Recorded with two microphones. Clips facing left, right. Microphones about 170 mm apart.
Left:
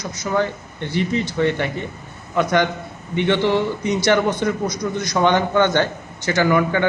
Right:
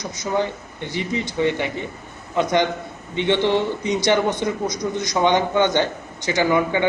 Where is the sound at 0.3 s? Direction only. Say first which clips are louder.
Left 2 dB; 15° right (ahead or behind).